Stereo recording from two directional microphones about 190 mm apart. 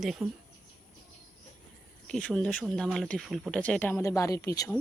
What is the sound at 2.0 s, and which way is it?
Speech, 5° left (ahead or behind).